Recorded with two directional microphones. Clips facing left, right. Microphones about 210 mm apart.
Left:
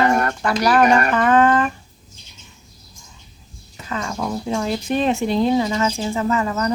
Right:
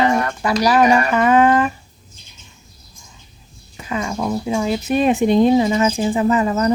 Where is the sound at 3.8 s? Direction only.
10° right (ahead or behind).